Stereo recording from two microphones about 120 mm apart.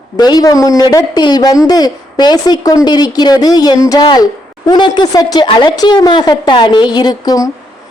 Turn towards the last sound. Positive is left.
turn(degrees=30)  # may be behind; listen again after turning